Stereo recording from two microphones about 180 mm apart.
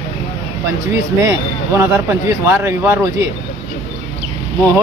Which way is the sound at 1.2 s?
15° right (ahead or behind).